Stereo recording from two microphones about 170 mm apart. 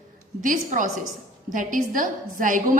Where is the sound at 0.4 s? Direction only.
50° right (ahead or behind).